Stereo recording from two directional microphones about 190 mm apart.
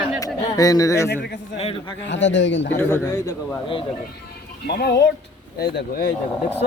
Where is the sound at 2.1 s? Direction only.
70° left (ahead or behind).